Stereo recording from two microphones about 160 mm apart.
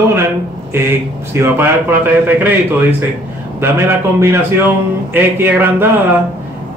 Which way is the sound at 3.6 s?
15° right (ahead or behind).